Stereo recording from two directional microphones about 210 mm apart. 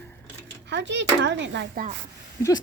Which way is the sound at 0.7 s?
55° right (ahead or behind).